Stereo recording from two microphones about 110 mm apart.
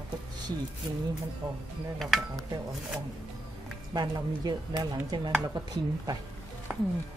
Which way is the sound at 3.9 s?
40° right (ahead or behind).